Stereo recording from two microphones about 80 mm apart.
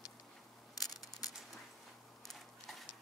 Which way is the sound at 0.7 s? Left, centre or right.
Left.